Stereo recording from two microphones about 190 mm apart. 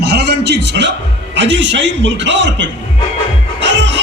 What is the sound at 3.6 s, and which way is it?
Music, 70° right (ahead or behind).